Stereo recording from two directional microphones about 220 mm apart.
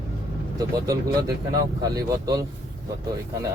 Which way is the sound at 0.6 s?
15° right (ahead or behind).